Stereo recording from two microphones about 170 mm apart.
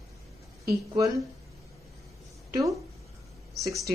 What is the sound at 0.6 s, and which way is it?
Speech, 20° right (ahead or behind).